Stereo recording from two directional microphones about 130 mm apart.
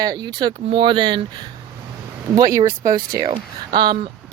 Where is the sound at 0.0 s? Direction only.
30° right (ahead or behind).